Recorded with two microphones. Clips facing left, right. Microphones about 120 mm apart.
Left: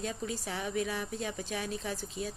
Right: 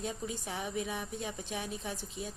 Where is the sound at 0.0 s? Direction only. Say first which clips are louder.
Left 2 dB; 15° right (ahead or behind).